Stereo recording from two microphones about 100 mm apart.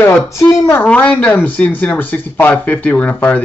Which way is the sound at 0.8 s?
15° left (ahead or behind).